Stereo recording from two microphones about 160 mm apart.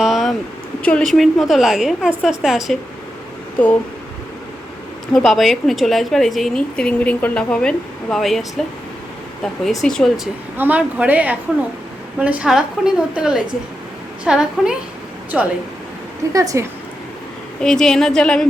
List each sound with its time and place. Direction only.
0.0 s a sound: centre (ahead or behind)
0.8 s a woman's voice: 5° left (ahead or behind)
5.1 s a woman's voice: centre (ahead or behind)
10.6 s a woman's voice: 10° right (ahead or behind)
16.3 s a woman's voice: 20° right (ahead or behind)
17.6 s a woman's voice: 5° left (ahead or behind)